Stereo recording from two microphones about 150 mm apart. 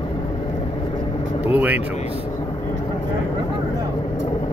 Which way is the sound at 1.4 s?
10° right (ahead or behind).